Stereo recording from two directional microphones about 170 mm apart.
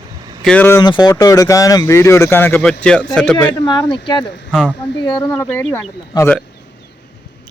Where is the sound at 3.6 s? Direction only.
25° left (ahead or behind).